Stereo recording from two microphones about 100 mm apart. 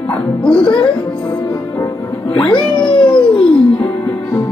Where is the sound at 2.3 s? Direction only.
60° left (ahead or behind).